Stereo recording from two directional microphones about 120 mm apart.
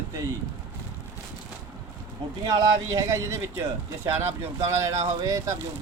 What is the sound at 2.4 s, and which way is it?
Speech, 35° right (ahead or behind).